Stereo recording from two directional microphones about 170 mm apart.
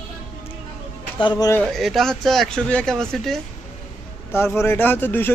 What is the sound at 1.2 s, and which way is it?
Speech, 25° left (ahead or behind).